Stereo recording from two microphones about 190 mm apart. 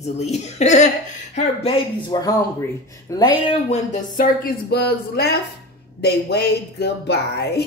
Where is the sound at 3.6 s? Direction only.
40° left (ahead or behind).